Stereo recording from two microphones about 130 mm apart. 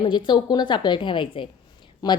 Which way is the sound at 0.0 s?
40° left (ahead or behind).